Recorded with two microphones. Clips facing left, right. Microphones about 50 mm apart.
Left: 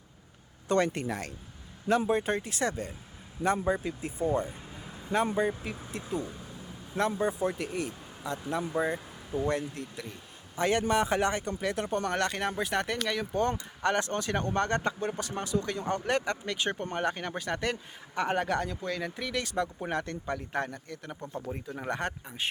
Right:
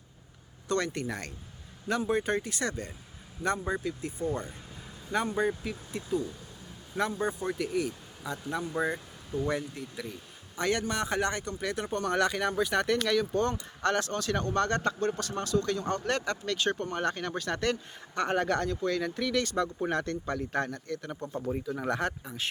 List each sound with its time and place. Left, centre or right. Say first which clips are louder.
0.7 s speech: left 3 dB; centre
6.0 s speech: right 3 dB; centre
7.2 s speech: left 2 dB; centre